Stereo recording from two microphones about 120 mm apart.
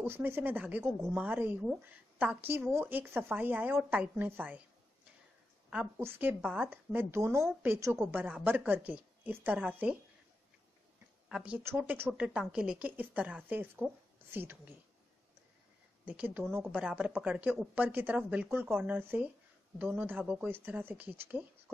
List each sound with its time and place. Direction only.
0.0 s speech: 20° right (ahead or behind)
5.9 s a woman's voice: 20° right (ahead or behind)
6.4 s a woman's voice: 5° right (ahead or behind)
11.2 s speech: 5° right (ahead or behind)
16.1 s speech: 15° right (ahead or behind)